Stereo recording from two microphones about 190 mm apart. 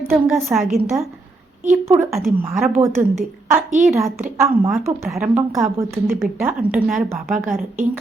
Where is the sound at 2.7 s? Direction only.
10° right (ahead or behind).